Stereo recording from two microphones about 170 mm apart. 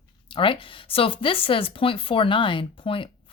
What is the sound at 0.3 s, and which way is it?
Speech, 30° left (ahead or behind).